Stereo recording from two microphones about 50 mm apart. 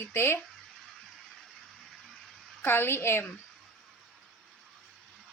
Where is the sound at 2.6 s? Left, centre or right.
Left.